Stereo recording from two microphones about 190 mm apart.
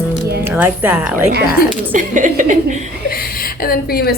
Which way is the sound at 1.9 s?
40° right (ahead or behind).